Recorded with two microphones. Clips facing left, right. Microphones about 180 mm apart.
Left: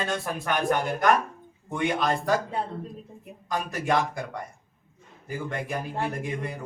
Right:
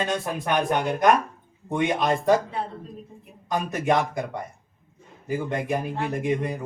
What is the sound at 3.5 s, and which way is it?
Speech, 20° right (ahead or behind).